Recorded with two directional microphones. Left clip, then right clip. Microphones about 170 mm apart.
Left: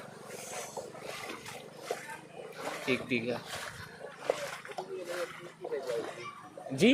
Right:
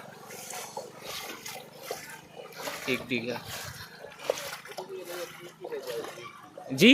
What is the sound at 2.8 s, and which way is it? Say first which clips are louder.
Speech: right 1 dB; 5° right (ahead or behind).